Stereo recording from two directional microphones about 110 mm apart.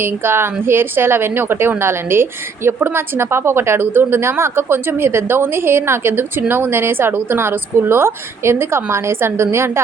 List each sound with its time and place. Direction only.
0.0 s a woman's voice: 20° right (ahead or behind)